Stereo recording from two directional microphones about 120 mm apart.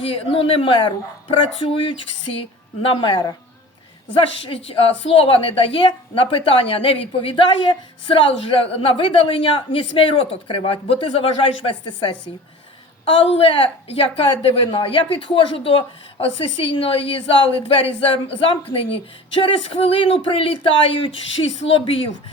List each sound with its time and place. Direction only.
0.0 s a woman's voice: 50° left (ahead or behind)
4.2 s a woman's voice: 50° left (ahead or behind)
13.2 s a woman's voice: 55° left (ahead or behind)